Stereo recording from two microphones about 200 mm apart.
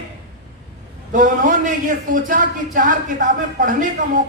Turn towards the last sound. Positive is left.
turn(degrees=-40)  # may be behind; listen again after turning